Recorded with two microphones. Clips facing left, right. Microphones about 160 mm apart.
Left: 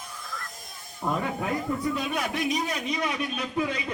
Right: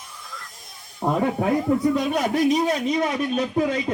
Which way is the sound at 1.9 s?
40° right (ahead or behind).